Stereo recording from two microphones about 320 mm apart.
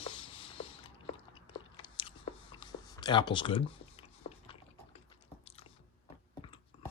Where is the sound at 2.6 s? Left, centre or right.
Centre.